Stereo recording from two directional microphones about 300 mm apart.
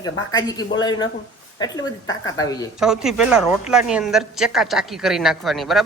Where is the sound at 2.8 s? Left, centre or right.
Centre.